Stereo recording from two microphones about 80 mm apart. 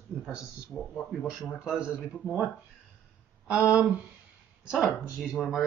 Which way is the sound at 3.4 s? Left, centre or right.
Centre.